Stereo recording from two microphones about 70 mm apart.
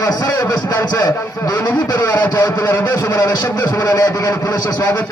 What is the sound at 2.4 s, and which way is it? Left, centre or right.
A man's voice, left.